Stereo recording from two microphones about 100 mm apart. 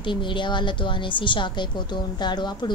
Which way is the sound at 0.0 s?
55° left (ahead or behind).